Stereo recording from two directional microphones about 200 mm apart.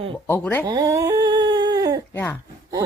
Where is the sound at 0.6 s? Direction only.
20° right (ahead or behind).